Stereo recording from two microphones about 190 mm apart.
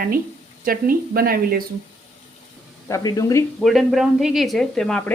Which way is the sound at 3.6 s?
Centre (ahead or behind).